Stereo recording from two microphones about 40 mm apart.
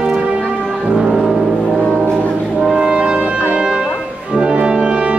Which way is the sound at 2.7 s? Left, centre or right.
Right.